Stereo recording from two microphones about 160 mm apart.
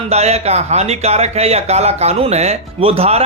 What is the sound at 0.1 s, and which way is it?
Speech, 40° right (ahead or behind).